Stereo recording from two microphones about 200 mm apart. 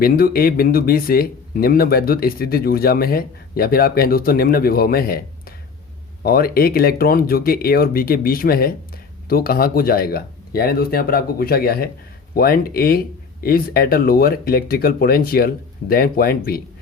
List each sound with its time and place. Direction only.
0.0 s speech: 50° left (ahead or behind)